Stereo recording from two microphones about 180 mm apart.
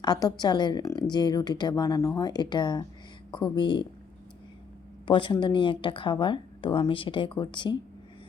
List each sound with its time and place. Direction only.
0.0 s a woman's voice: 25° left (ahead or behind)
5.0 s a woman's voice: 25° left (ahead or behind)